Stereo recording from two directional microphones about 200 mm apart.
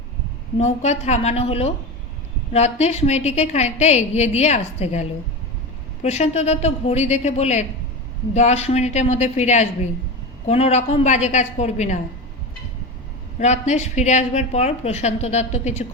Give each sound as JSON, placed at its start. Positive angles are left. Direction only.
{"t": 0.6, "sound": "a woman's voice", "side_deg": 35}
{"t": 13.4, "sound": "a woman's voice", "side_deg": 35}